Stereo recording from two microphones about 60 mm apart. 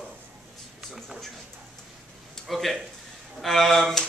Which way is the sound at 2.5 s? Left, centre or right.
Centre.